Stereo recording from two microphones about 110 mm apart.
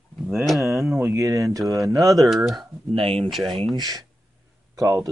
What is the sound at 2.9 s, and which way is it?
Speech, 60° right (ahead or behind).